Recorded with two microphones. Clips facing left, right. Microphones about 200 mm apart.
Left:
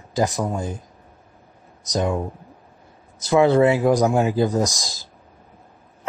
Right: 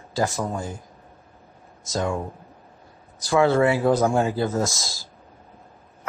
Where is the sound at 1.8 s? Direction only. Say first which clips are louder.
Left 3 dB; 20° left (ahead or behind).